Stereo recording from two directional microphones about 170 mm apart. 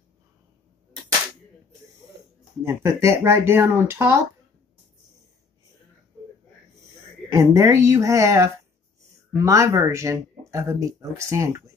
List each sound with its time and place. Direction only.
2.6 s speech: 15° right (ahead or behind)
7.3 s speech: 15° right (ahead or behind)